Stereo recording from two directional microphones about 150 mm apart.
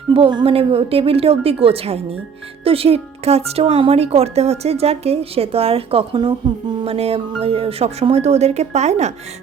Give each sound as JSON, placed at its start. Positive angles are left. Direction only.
{"t": 0.1, "sound": "a woman's voice", "side_deg": -35}